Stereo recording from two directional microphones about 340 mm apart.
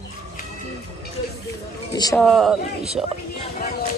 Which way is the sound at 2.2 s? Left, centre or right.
Centre.